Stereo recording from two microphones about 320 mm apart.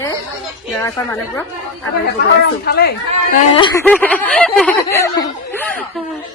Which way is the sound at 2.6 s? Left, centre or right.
Left.